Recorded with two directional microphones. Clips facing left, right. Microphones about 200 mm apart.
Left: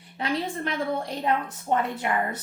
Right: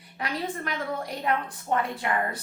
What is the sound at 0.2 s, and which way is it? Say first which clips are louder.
A woman's voice: left 3 dB; 25° left (ahead or behind).